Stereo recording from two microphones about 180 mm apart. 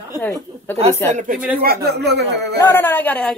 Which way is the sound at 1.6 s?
60° right (ahead or behind).